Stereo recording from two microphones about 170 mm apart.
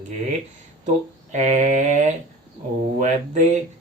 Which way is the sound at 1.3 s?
45° right (ahead or behind).